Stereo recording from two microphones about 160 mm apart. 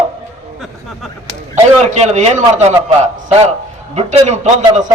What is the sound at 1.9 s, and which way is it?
Speech, 45° right (ahead or behind).